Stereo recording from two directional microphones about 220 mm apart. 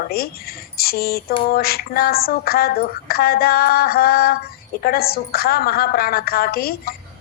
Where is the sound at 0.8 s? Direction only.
45° left (ahead or behind).